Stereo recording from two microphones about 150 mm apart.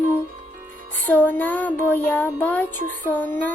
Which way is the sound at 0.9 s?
10° left (ahead or behind).